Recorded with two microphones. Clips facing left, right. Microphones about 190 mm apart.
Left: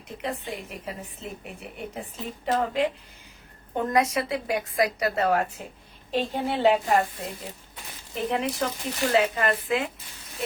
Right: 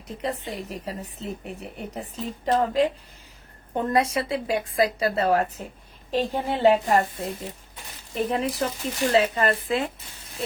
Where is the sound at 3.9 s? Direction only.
30° right (ahead or behind).